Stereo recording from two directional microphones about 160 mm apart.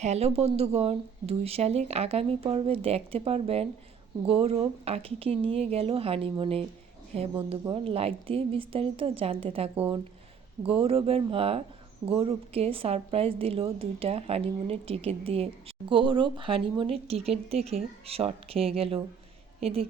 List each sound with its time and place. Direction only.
0.0 s a woman's voice: 40° right (ahead or behind)